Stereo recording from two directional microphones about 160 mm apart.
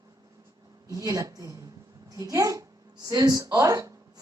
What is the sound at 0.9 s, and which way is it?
A woman's voice, 20° right (ahead or behind).